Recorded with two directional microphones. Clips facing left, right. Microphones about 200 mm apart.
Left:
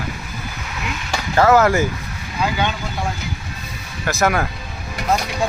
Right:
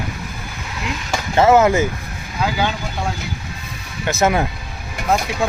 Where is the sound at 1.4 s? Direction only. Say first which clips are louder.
Right 1 dB; 20° right (ahead or behind).